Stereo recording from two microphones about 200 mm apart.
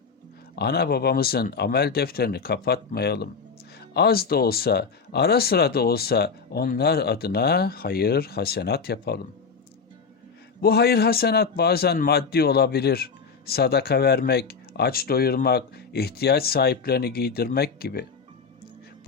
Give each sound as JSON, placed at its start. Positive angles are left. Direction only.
{"t": 0.5, "sound": "a man's voice", "side_deg": 55}
{"t": 10.6, "sound": "a man's voice", "side_deg": 50}